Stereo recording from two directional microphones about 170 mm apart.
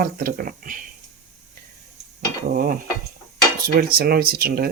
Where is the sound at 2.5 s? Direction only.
60° right (ahead or behind).